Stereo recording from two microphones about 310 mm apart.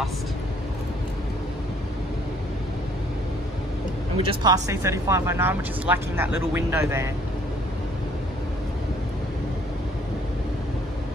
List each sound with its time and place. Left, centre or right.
4.2 s speech: centre